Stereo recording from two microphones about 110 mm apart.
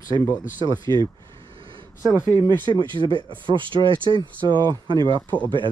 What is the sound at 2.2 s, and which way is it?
Speech, 35° right (ahead or behind).